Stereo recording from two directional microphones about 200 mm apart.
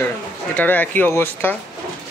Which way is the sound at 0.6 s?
10° left (ahead or behind).